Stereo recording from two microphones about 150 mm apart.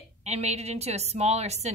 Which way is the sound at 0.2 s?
45° right (ahead or behind).